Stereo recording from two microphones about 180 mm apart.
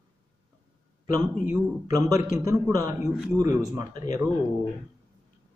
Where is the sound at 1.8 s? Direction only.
20° right (ahead or behind).